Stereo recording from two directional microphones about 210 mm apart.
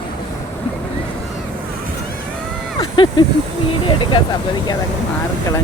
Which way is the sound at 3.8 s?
25° left (ahead or behind).